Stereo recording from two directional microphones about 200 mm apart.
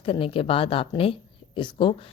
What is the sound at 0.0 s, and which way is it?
Speech, 25° left (ahead or behind).